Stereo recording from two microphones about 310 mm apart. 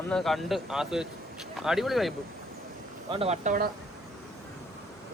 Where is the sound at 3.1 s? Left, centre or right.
Centre.